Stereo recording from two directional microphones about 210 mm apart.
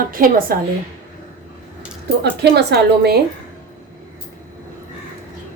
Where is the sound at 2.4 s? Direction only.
50° right (ahead or behind).